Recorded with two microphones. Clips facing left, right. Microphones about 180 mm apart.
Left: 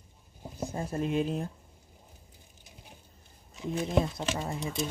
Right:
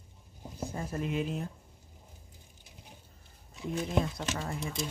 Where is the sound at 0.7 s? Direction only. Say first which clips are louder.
Left 4 dB; 30° left (ahead or behind).